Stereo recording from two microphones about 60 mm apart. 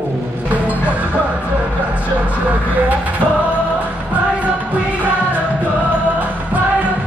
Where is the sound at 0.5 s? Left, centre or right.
Right.